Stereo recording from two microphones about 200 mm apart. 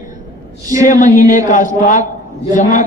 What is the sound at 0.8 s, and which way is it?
Speech, 40° left (ahead or behind).